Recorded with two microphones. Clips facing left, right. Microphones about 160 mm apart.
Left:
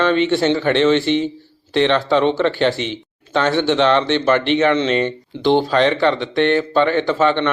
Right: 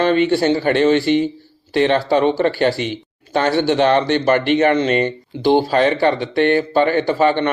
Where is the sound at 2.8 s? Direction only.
50° right (ahead or behind).